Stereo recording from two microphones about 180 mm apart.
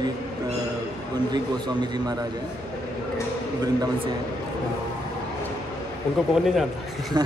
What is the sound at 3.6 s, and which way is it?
Speech, 20° right (ahead or behind).